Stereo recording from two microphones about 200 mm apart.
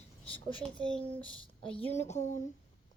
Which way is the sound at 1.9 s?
35° left (ahead or behind).